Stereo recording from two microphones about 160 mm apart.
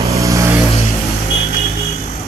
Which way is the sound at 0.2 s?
20° right (ahead or behind).